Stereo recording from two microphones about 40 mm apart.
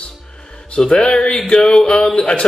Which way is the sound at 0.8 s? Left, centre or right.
Left.